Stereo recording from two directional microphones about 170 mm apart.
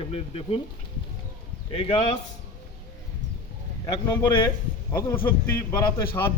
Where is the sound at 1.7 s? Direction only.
35° left (ahead or behind).